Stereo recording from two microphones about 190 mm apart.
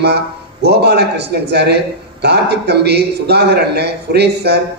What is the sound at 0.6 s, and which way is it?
A man's voice, 60° right (ahead or behind).